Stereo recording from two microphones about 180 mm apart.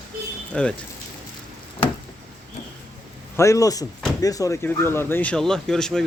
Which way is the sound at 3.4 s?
20° left (ahead or behind).